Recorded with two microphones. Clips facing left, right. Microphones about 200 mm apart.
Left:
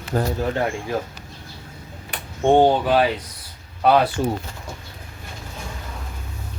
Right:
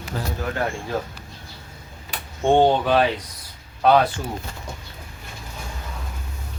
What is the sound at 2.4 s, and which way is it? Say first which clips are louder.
Speech: left 1 dB; 10° left (ahead or behind).